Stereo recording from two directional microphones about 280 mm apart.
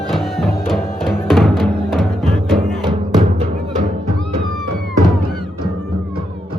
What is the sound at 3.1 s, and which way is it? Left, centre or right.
Music, right.